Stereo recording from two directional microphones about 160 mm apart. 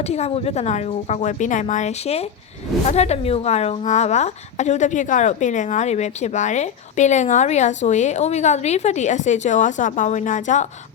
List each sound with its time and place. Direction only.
0.1 s speech: 40° left (ahead or behind)